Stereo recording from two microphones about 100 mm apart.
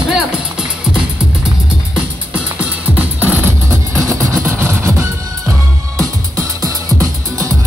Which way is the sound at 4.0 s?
30° right (ahead or behind).